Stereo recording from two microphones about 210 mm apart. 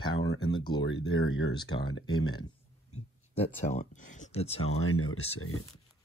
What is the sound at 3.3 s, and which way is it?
Speech, 30° left (ahead or behind).